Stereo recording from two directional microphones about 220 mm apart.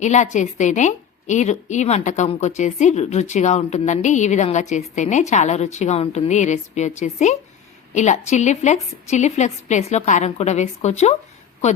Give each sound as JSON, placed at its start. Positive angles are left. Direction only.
{"t": 0.0, "sound": "a woman's voice", "side_deg": 35}